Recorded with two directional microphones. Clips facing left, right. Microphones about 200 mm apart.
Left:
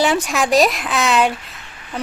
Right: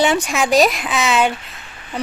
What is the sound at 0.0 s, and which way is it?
Speech, centre (ahead or behind).